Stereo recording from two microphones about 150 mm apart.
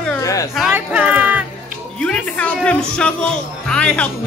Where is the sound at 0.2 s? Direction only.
20° left (ahead or behind).